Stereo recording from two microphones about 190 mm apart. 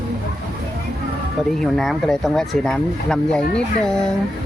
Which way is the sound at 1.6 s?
Centre (ahead or behind).